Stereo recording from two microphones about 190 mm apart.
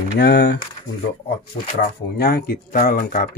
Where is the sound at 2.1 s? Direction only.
55° left (ahead or behind).